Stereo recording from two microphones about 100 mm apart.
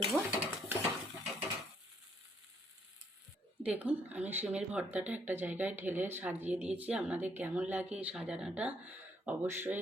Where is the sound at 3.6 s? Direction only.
15° right (ahead or behind).